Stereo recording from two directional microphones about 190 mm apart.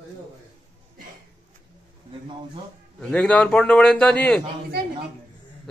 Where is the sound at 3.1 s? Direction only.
5° left (ahead or behind).